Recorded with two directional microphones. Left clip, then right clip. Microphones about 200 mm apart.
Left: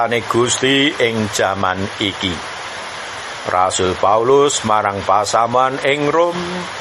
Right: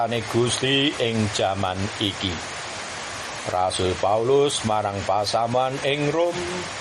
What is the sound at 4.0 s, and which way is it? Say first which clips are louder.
Speech: left 8 dB; 30° left (ahead or behind).